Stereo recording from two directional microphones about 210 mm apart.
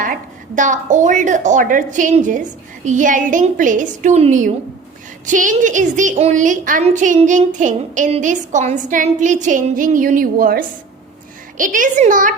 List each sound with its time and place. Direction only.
0.0 s a woman's voice: 40° right (ahead or behind)